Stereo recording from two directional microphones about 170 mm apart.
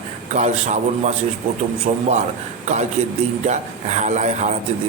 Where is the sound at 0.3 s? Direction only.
40° right (ahead or behind).